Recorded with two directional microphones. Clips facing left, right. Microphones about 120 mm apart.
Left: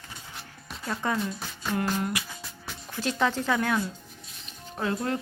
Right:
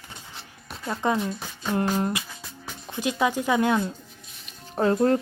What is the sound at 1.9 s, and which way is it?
Speech, 30° right (ahead or behind).